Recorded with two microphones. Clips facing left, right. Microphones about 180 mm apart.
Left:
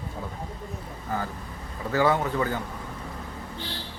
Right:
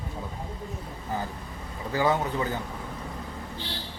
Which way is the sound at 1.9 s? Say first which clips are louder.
Left 2 dB; 15° right (ahead or behind).